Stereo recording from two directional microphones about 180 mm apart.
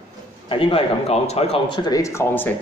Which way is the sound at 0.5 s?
30° left (ahead or behind).